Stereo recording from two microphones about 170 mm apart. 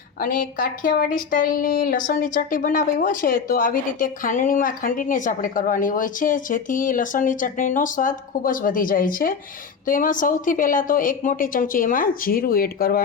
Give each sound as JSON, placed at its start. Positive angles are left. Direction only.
{"t": 0.2, "sound": "a woman's voice", "side_deg": 55}